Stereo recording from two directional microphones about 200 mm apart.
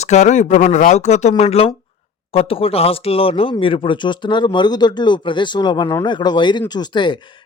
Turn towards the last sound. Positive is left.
turn(degrees=25)  # may be behind; listen again after turning